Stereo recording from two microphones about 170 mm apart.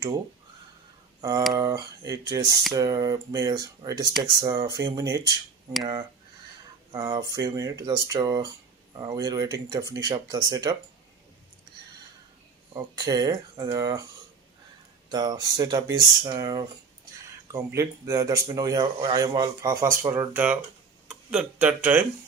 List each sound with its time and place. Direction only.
1.2 s speech: 20° right (ahead or behind)
12.7 s speech: 20° right (ahead or behind)
15.1 s speech: 25° right (ahead or behind)